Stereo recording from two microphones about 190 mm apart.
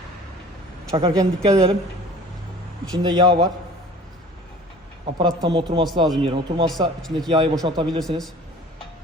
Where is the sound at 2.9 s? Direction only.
25° right (ahead or behind).